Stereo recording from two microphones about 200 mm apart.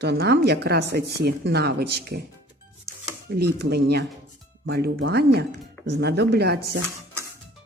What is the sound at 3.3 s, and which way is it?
Speech, 55° right (ahead or behind).